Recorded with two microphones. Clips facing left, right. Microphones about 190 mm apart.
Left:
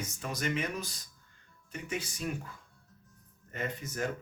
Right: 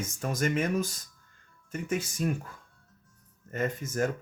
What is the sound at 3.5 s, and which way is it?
Speech, 45° right (ahead or behind).